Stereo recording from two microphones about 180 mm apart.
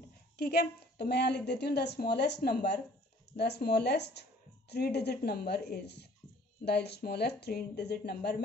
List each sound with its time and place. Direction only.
0.4 s a woman's voice: 60° left (ahead or behind)